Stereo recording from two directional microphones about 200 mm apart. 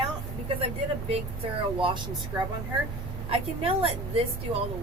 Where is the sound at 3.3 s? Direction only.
30° right (ahead or behind).